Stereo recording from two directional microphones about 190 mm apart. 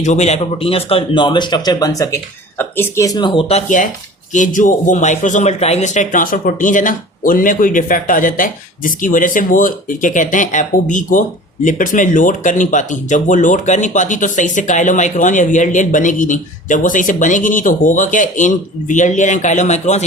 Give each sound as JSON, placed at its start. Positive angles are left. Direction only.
{"t": 0.0, "sound": "speech", "side_deg": 35}
{"t": 4.3, "sound": "speech", "side_deg": 40}